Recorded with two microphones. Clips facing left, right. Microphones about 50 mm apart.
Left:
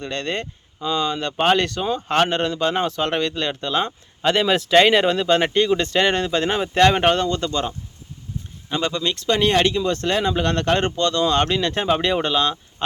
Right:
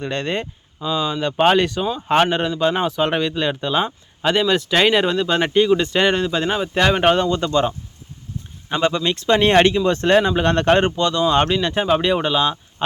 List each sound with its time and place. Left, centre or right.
0.0 s speech: centre
0.8 s speech: centre
1.8 s speech: centre
2.0 s speech: centre
10.8 s speech: centre